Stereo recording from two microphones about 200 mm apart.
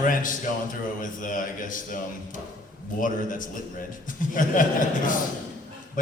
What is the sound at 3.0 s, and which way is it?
Speech, 40° left (ahead or behind).